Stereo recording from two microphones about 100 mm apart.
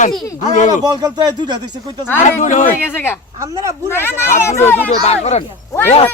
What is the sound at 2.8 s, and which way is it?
Speech, 20° left (ahead or behind).